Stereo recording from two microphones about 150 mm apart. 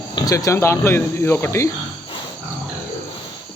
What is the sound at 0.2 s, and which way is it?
Speech, 25° left (ahead or behind).